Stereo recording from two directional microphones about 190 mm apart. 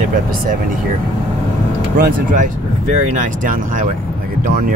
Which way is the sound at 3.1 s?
45° right (ahead or behind).